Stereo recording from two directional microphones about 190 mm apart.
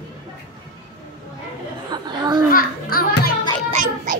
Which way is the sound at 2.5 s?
50° left (ahead or behind).